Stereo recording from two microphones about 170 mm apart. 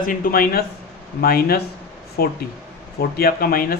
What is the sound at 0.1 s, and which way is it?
Speech, 60° left (ahead or behind).